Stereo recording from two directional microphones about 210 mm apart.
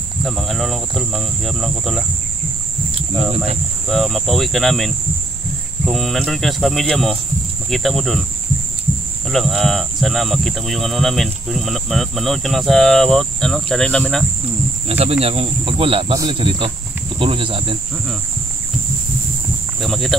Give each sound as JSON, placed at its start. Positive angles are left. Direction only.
{"t": 0.2, "sound": "speech", "side_deg": 0}
{"t": 3.9, "sound": "speech", "side_deg": 0}
{"t": 9.3, "sound": "speech", "side_deg": 0}
{"t": 14.9, "sound": "speech", "side_deg": -30}
{"t": 19.8, "sound": "speech", "side_deg": 0}